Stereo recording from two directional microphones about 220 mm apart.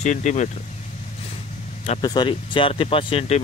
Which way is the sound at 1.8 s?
30° left (ahead or behind).